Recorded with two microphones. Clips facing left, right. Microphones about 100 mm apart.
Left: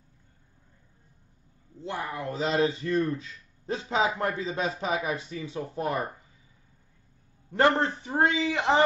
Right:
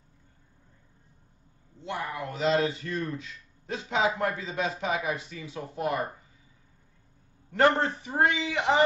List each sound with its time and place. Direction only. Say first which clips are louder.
1.8 s a man's voice: even; 35° left (ahead or behind)
8.0 s a man's voice: left 1 dB; 30° left (ahead or behind)